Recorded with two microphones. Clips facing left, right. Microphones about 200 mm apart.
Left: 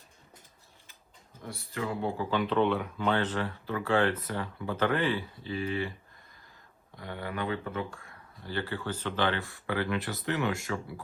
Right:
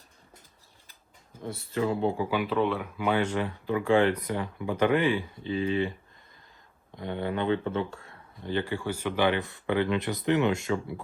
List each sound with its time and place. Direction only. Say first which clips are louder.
1.5 s speech: right 6 dB; 25° right (ahead or behind)
6.9 s speech: right 6 dB; 20° right (ahead or behind)